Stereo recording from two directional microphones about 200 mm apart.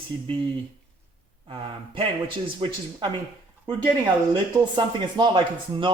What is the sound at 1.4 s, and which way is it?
Speech, 25° right (ahead or behind).